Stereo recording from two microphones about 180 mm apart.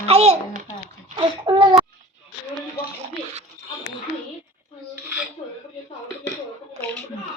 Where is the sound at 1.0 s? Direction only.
30° right (ahead or behind).